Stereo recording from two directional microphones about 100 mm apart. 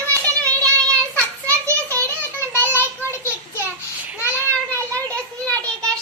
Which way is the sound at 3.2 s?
25° left (ahead or behind).